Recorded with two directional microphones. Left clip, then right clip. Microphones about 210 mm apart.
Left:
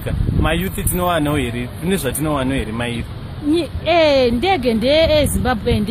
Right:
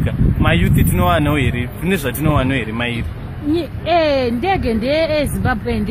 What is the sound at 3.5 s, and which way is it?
Speech, 45° left (ahead or behind).